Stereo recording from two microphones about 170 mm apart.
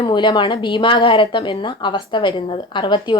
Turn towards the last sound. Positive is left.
turn(degrees=25)  # may be behind; listen again after turning